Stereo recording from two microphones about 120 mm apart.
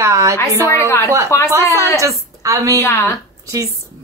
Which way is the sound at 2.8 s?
20° left (ahead or behind).